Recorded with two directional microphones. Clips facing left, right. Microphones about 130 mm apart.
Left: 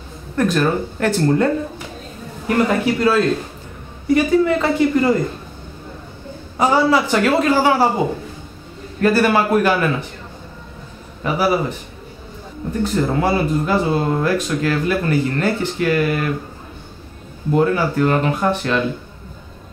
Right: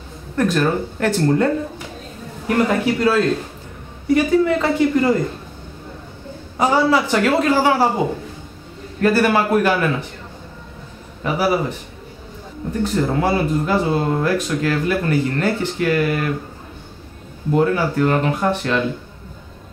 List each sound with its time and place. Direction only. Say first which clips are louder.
0.4 s speech: left 1 dB; 20° left (ahead or behind)
6.6 s a man's voice: left 1 dB; 15° left (ahead or behind)
9.0 s speech: left 1 dB; 20° left (ahead or behind)
11.2 s speech: left 1 dB; 20° left (ahead or behind)
13.0 s speech: left 1 dB; 25° left (ahead or behind)
17.6 s speech: left 1 dB; 25° left (ahead or behind)